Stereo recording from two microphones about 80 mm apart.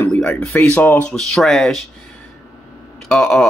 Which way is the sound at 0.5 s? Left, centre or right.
Left.